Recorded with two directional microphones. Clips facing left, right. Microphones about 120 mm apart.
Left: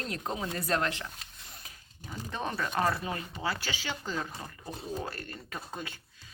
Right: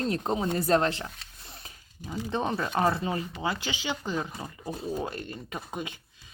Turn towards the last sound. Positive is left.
turn(degrees=-20)  # may be behind; listen again after turning